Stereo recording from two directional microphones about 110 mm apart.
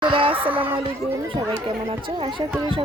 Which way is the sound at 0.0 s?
50° right (ahead or behind).